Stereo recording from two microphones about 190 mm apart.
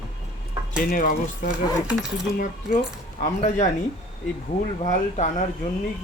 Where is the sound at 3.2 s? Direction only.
40° left (ahead or behind).